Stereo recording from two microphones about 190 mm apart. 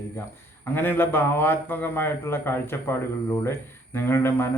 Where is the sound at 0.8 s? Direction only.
10° left (ahead or behind).